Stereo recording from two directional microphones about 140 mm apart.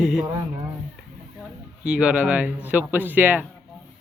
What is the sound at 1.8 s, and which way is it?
Speech, 10° right (ahead or behind).